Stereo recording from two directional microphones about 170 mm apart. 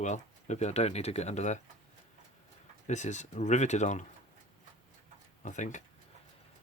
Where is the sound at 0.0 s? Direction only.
45° left (ahead or behind).